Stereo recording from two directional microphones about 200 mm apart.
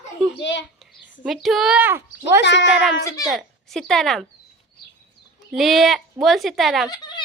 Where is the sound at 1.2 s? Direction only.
Centre (ahead or behind).